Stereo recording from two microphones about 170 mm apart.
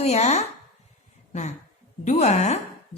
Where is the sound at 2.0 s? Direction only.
40° left (ahead or behind).